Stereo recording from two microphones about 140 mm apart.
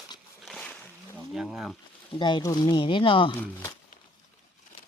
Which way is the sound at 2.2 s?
30° left (ahead or behind).